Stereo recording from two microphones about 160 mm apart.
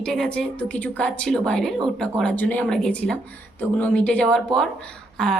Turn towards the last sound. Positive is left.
turn(degrees=5)  # may be behind; listen again after turning